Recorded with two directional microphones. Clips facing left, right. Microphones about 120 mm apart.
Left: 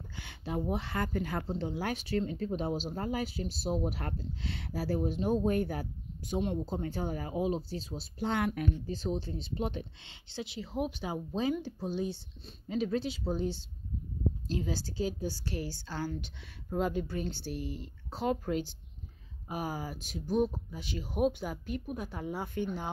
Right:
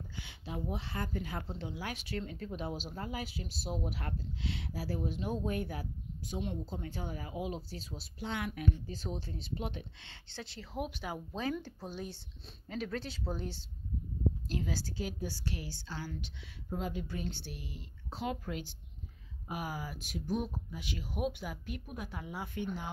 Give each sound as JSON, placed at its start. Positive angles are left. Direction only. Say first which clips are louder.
{"t": 0.2, "sound": "speech", "louder": "left 6 dB", "side_deg": 50}
{"t": 1.5, "sound": "speech", "louder": "left 7 dB", "side_deg": 40}
{"t": 8.2, "sound": "speech", "louder": "left 7 dB", "side_deg": 45}
{"t": 8.8, "sound": "a woman's voice", "louder": "left 7 dB", "side_deg": 30}
{"t": 10.0, "sound": "a woman's voice", "louder": "left 6 dB", "side_deg": 15}